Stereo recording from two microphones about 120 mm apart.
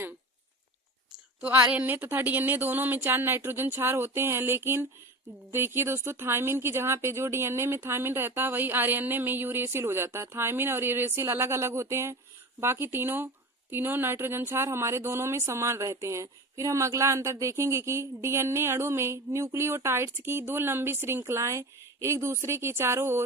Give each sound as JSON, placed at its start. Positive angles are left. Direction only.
{"t": 1.4, "sound": "speech", "side_deg": -15}